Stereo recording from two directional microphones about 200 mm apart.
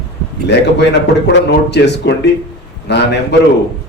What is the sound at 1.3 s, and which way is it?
A man's voice, 60° left (ahead or behind).